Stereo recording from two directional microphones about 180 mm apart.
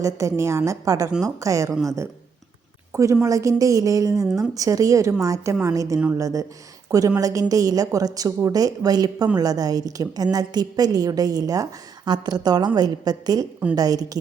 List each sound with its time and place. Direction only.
0.0 s a woman's voice: 15° right (ahead or behind)